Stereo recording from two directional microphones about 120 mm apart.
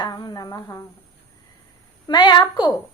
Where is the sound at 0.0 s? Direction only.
35° left (ahead or behind).